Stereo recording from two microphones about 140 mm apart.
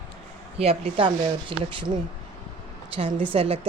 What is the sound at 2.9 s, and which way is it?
Speech, 40° right (ahead or behind).